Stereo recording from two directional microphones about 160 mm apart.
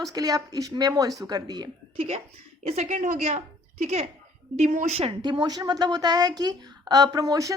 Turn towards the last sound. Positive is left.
turn(degrees=-20)  # may be behind; listen again after turning